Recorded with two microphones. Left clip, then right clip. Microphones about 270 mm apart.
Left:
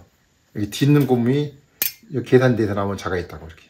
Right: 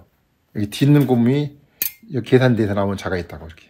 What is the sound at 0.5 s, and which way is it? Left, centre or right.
Speech, right.